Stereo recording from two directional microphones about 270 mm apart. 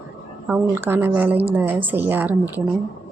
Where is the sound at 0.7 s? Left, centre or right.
Centre.